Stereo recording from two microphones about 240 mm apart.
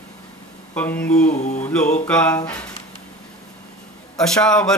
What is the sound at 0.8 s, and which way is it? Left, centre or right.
Speech, centre.